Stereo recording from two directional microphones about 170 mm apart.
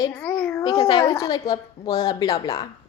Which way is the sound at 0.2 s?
5° left (ahead or behind).